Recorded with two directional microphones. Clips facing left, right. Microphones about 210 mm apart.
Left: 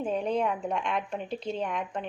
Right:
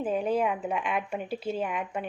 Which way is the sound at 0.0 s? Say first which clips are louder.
Right 1 dB; 5° right (ahead or behind).